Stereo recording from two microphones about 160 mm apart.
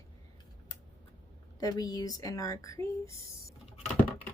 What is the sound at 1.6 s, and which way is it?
Speech, 25° left (ahead or behind).